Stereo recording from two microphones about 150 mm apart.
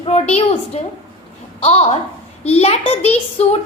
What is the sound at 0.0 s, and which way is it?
A woman's voice, 45° left (ahead or behind).